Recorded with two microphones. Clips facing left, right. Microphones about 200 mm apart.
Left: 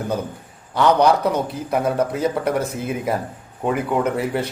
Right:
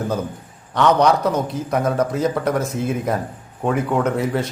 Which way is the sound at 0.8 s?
10° left (ahead or behind).